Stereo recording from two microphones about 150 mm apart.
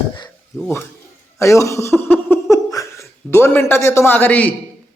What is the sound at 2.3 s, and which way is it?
Laughter, 20° left (ahead or behind).